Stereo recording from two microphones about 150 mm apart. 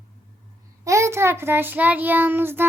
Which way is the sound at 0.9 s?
20° right (ahead or behind).